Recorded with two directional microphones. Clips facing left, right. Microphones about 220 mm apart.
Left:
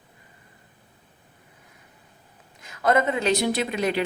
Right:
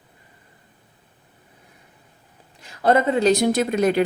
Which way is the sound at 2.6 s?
30° right (ahead or behind).